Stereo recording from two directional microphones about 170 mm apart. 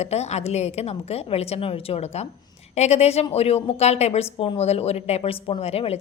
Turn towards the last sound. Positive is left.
turn(degrees=35)  # may be behind; listen again after turning